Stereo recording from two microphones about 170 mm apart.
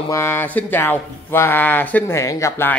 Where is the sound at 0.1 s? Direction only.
15° left (ahead or behind).